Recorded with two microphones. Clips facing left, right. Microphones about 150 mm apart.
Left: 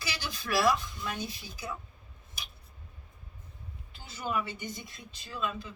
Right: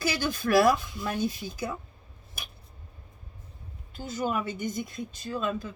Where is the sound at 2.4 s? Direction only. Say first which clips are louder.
Right 3 dB; 55° right (ahead or behind).